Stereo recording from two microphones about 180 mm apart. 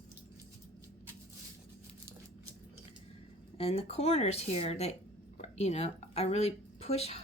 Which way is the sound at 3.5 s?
35° left (ahead or behind).